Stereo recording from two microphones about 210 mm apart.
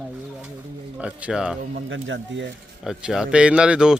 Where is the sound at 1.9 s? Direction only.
60° right (ahead or behind).